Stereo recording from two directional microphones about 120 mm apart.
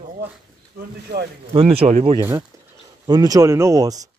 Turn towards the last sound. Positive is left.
turn(degrees=-30)  # may be behind; listen again after turning